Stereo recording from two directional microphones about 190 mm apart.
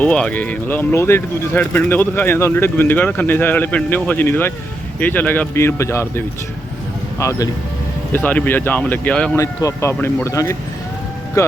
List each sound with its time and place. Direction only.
0.0 s speech: 5° left (ahead or behind)
9.4 s speech: 15° left (ahead or behind)